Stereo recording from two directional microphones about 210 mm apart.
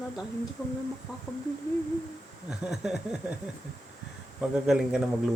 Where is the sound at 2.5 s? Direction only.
Centre (ahead or behind).